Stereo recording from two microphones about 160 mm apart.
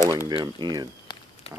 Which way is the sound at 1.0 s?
30° left (ahead or behind).